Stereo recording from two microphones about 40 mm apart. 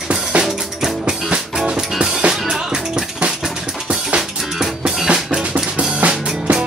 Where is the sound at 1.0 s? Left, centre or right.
Right.